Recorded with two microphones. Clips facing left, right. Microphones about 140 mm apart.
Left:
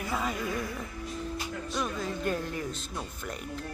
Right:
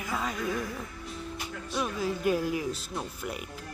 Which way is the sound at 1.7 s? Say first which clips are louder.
Right 3 dB; 5° right (ahead or behind).